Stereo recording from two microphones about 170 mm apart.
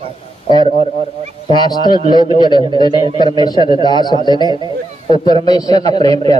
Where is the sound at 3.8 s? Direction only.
25° left (ahead or behind).